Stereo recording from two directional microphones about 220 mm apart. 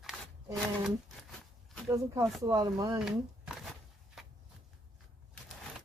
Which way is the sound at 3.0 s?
Centre (ahead or behind).